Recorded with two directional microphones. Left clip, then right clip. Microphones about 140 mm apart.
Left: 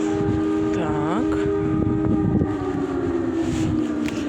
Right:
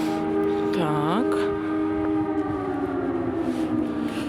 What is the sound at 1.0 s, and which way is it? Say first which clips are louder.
Music: left 1 dB; 20° right (ahead or behind).